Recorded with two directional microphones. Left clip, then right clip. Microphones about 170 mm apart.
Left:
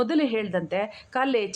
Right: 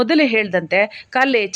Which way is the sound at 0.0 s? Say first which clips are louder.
Right 9 dB; 20° right (ahead or behind).